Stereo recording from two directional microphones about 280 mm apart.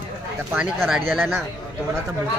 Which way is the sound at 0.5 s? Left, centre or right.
Centre.